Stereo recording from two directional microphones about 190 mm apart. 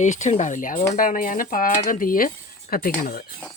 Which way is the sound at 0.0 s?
40° left (ahead or behind).